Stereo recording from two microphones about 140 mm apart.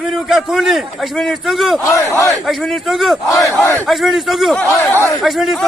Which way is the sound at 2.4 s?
Centre (ahead or behind).